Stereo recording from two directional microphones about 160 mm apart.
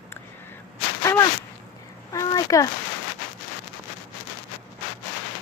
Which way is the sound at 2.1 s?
20° left (ahead or behind).